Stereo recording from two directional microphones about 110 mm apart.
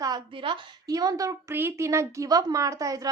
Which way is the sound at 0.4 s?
50° right (ahead or behind).